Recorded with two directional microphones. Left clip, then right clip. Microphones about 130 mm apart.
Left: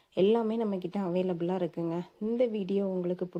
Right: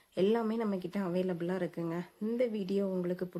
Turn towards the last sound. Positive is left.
turn(degrees=10)  # may be behind; listen again after turning